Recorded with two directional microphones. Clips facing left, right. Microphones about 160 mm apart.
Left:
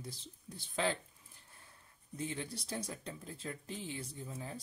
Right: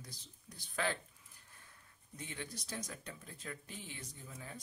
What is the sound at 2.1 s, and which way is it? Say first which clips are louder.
Speech: left 6 dB; 30° left (ahead or behind).